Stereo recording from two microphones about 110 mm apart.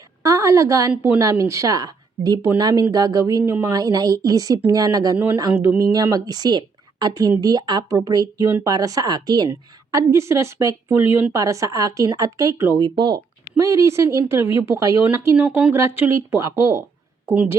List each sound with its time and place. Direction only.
0.2 s a woman's voice: 30° right (ahead or behind)
3.7 s a woman's voice: 35° right (ahead or behind)
5.1 s a woman's voice: 20° right (ahead or behind); by 9.5 s 40° right (ahead or behind)
9.5 s a woman's voice: 25° right (ahead or behind)
11.3 s a woman's voice: 30° right (ahead or behind)
12.8 s a woman's voice: 40° right (ahead or behind)
13.6 s a woman's voice: 30° right (ahead or behind)
15.4 s speech: 10° right (ahead or behind)
15.7 s a woman's voice: 25° right (ahead or behind)